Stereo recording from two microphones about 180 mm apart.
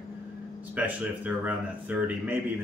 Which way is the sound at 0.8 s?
10° right (ahead or behind).